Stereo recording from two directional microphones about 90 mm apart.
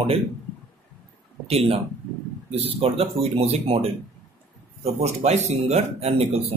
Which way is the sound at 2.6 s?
90° right.